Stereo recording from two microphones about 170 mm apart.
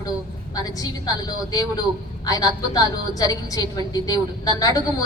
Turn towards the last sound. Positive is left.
turn(degrees=20)  # may be behind; listen again after turning